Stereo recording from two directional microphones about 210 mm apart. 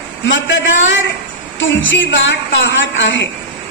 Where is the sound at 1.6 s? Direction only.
65° left (ahead or behind).